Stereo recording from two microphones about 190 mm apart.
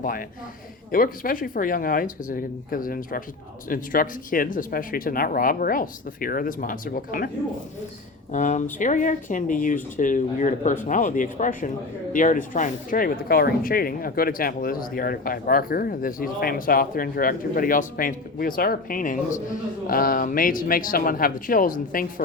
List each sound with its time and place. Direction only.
0.0 s speech: 45° left (ahead or behind)
8.3 s speech: 40° left (ahead or behind)